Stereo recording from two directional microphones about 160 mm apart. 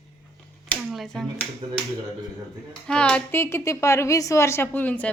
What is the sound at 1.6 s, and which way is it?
Speech, 35° right (ahead or behind).